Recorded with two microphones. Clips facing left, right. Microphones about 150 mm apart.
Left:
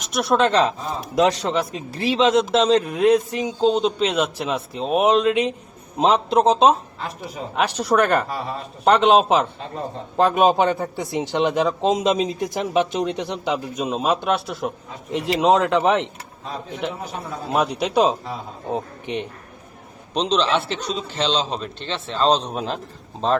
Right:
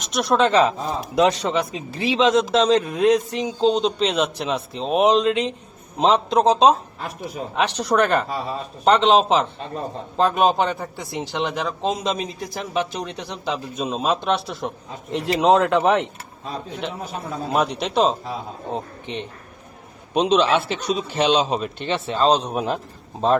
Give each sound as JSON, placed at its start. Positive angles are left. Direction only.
{"t": 0.0, "sound": "a man's voice", "side_deg": 5}
{"t": 17.5, "sound": "a man's voice", "side_deg": 0}
{"t": 20.1, "sound": "a man's voice", "side_deg": -10}